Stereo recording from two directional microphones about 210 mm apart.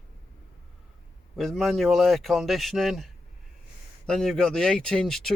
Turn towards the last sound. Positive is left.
turn(degrees=0)  # may be behind; listen again after turning